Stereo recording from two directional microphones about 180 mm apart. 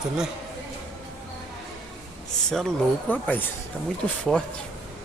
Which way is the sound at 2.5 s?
5° left (ahead or behind).